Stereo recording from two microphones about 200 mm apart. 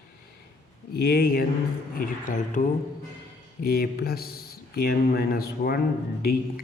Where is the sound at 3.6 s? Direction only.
50° left (ahead or behind).